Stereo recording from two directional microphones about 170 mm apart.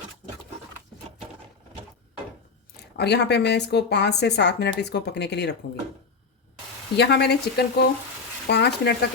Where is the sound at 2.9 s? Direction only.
80° left.